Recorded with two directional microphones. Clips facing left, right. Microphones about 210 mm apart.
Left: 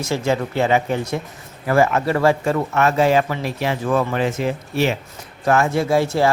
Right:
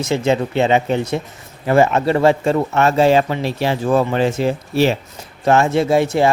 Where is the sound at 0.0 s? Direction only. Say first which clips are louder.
Right 3 dB; 20° right (ahead or behind).